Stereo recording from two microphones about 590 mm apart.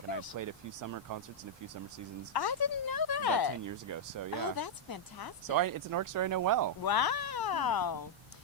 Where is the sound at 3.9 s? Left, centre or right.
Right.